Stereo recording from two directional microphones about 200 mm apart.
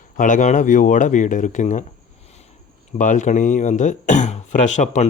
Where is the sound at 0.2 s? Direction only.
40° left (ahead or behind).